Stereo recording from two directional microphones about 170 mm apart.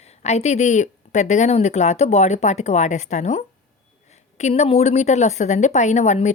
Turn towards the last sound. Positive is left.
turn(degrees=40)  # may be behind; listen again after turning